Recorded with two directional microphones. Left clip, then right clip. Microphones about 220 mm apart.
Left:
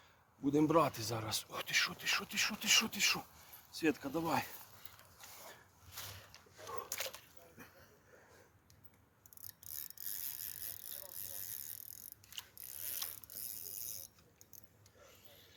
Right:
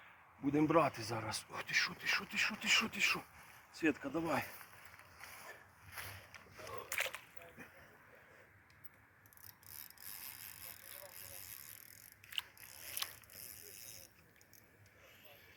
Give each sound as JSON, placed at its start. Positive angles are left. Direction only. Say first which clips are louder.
{"t": 0.4, "sound": "speech", "louder": "left 1 dB", "side_deg": 55}
{"t": 6.0, "sound": "a sound", "louder": "right 1 dB", "side_deg": -15}
{"t": 7.6, "sound": "a sound", "louder": "even", "side_deg": 0}
{"t": 9.5, "sound": "bicycle", "louder": "left 4 dB", "side_deg": 35}
{"t": 12.3, "sound": "ratchet", "louder": "right 7 dB", "side_deg": 15}
{"t": 13.0, "sound": "mechanisms", "louder": "right 4 dB", "side_deg": 5}
{"t": 13.4, "sound": "mechanisms", "louder": "left 6 dB", "side_deg": 25}